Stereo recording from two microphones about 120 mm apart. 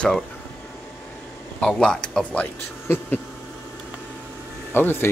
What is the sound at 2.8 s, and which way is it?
Insect, 20° left (ahead or behind).